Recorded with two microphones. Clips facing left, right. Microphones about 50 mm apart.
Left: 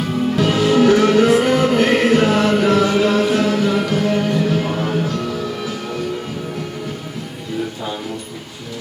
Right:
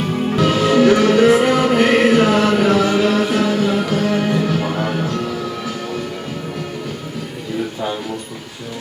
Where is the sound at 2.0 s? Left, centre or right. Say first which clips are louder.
Right 1 dB; right.